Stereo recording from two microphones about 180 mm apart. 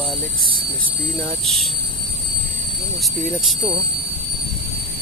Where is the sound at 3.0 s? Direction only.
Centre (ahead or behind).